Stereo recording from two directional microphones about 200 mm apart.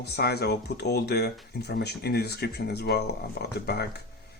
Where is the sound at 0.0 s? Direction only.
55° left (ahead or behind).